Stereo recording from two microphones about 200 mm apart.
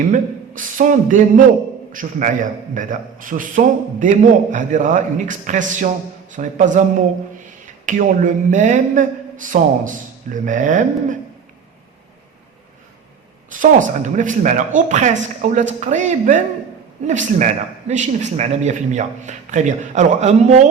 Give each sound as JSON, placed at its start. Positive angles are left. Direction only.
{"t": 0.1, "sound": "a man's voice", "side_deg": -40}
{"t": 7.9, "sound": "a man's voice", "side_deg": -40}
{"t": 13.5, "sound": "a man's voice", "side_deg": -40}